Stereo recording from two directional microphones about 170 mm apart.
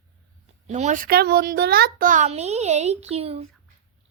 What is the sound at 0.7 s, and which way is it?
A child's voice, 45° right (ahead or behind).